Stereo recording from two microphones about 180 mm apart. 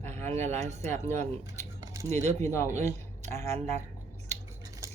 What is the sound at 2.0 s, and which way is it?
Speech, 40° right (ahead or behind).